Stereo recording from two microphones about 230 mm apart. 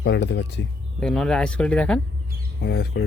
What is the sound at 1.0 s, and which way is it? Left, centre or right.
Speech, centre.